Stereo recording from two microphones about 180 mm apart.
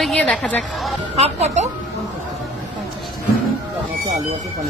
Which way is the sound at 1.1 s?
35° right (ahead or behind).